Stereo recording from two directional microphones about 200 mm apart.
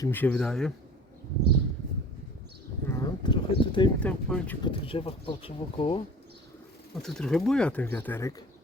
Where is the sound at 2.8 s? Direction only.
15° left (ahead or behind).